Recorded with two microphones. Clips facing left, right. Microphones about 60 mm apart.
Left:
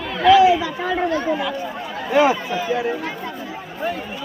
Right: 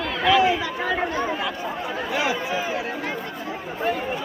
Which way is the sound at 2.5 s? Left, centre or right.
Right.